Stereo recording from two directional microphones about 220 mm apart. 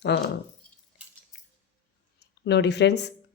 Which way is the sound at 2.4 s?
50° left (ahead or behind).